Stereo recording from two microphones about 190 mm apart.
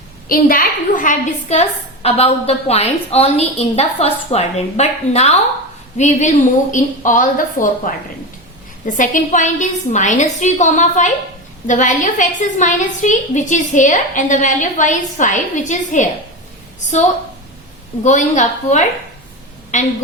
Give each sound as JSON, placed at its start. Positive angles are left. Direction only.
{"t": 0.3, "sound": "a woman's voice", "side_deg": 50}
{"t": 9.0, "sound": "a woman's voice", "side_deg": 40}
{"t": 18.0, "sound": "a woman's voice", "side_deg": 40}